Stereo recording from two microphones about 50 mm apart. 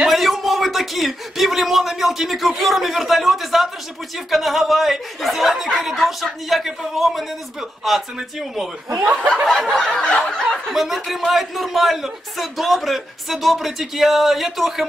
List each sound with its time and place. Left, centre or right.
0.1 s a sound: centre
4.3 s a man's voice: centre
9.0 s chuckle: right
9.8 s snicker: centre
10.7 s a man's voice: centre